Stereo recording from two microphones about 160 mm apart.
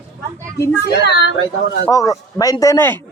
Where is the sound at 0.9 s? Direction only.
90° left.